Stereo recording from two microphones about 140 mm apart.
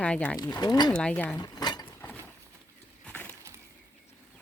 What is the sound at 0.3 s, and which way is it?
Speech, 30° left (ahead or behind).